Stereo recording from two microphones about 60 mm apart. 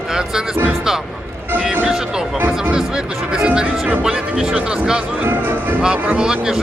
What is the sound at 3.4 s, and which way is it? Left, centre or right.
Music, right.